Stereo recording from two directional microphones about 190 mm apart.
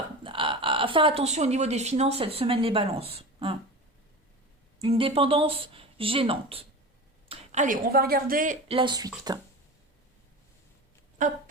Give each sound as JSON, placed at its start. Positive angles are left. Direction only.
{"t": 0.2, "sound": "speech", "side_deg": -25}
{"t": 4.8, "sound": "speech", "side_deg": -30}
{"t": 7.3, "sound": "speech", "side_deg": -40}
{"t": 8.6, "sound": "speech", "side_deg": -25}
{"t": 11.2, "sound": "a sound", "side_deg": -40}